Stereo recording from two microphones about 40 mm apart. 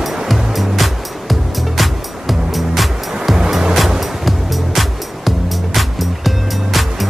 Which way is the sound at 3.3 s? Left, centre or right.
Centre.